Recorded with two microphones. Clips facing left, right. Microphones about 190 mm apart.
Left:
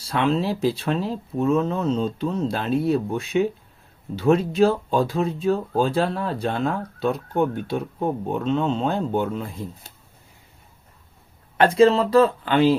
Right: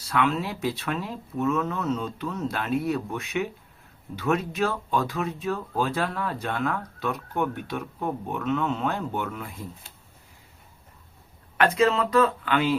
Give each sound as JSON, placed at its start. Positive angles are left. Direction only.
{"t": 0.1, "sound": "speech", "side_deg": 30}
{"t": 11.5, "sound": "speech", "side_deg": 30}